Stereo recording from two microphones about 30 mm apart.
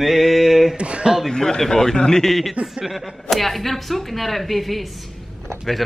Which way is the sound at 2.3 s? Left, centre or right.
Centre.